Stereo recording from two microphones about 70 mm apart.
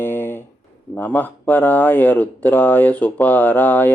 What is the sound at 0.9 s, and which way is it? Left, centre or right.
Speech, left.